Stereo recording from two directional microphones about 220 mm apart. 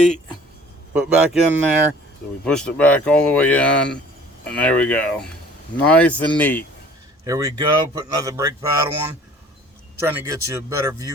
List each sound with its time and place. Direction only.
0.9 s speech: 5° right (ahead or behind)
7.3 s speech: 15° right (ahead or behind)
10.0 s speech: 10° right (ahead or behind)